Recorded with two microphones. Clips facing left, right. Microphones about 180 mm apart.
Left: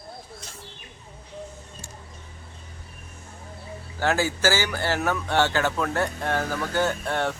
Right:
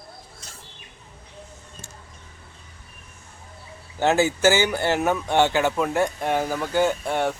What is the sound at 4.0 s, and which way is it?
Speech, 20° right (ahead or behind).